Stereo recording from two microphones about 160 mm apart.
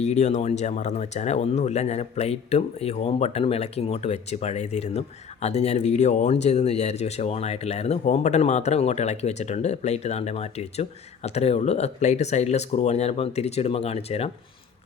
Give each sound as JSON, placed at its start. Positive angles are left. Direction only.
{"t": 0.0, "sound": "speech", "side_deg": 45}